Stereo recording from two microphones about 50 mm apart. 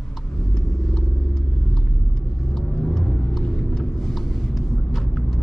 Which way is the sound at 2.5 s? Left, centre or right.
Centre.